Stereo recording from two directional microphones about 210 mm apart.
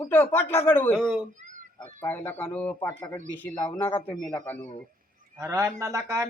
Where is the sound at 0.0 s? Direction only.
10° left (ahead or behind).